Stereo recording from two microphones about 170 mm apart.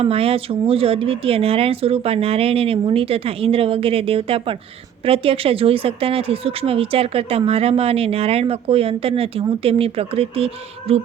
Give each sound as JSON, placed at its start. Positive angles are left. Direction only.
{"t": 0.0, "sound": "speech", "side_deg": -35}